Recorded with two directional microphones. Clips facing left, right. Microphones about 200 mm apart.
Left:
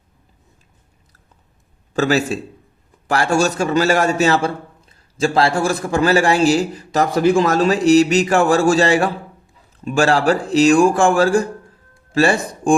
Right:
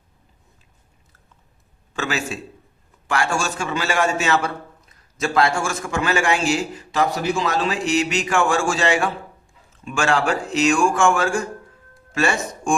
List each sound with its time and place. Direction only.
1.9 s a man's voice: 40° left (ahead or behind)